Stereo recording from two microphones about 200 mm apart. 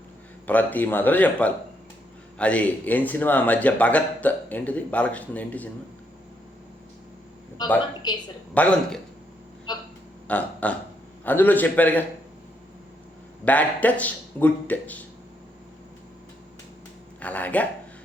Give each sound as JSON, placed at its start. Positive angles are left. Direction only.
{"t": 0.4, "sound": "speech", "side_deg": 10}
{"t": 7.6, "sound": "a woman's voice", "side_deg": 20}
{"t": 8.5, "sound": "a man's voice", "side_deg": 5}
{"t": 9.7, "sound": "a sound", "side_deg": 20}
{"t": 10.2, "sound": "a sound", "side_deg": 5}
{"t": 11.3, "sound": "speech", "side_deg": 10}
{"t": 13.4, "sound": "speech", "side_deg": 10}
{"t": 17.2, "sound": "speech", "side_deg": 5}